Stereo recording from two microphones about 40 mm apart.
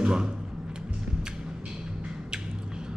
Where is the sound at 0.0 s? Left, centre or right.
Right.